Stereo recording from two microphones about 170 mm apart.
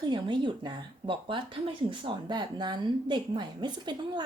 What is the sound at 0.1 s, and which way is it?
Speech, 25° right (ahead or behind).